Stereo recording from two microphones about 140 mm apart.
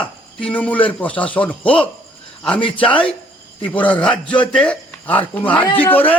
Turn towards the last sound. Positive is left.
turn(degrees=10)  # may be behind; listen again after turning